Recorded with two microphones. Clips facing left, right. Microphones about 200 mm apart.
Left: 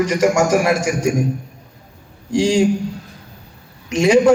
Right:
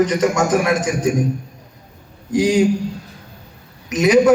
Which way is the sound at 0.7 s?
10° left (ahead or behind).